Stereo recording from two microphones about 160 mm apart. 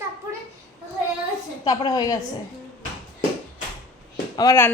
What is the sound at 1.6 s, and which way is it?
Speech, 25° left (ahead or behind).